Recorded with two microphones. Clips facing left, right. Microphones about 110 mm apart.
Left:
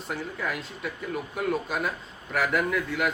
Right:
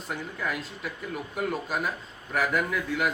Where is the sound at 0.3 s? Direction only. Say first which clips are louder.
Even; centre (ahead or behind).